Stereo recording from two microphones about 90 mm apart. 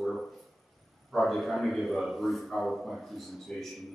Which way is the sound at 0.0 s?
5° left (ahead or behind).